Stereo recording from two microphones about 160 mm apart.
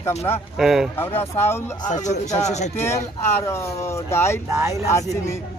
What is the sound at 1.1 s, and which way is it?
Speech, 15° left (ahead or behind).